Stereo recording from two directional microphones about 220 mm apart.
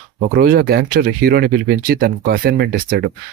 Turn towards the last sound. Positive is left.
turn(degrees=-45)  # may be behind; listen again after turning